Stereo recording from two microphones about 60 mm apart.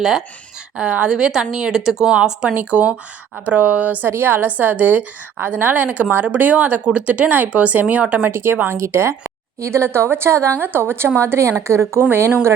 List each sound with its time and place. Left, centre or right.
0.8 s a woman's voice: centre
8.3 s a woman's voice: right
10.6 s a woman's voice: right